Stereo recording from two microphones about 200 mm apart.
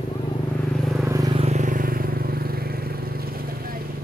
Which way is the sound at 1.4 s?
35° right (ahead or behind).